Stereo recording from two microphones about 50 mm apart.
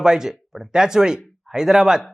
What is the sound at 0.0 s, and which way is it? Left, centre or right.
Speech, centre.